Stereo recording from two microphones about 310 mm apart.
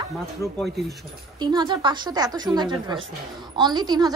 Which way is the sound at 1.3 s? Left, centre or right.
Centre.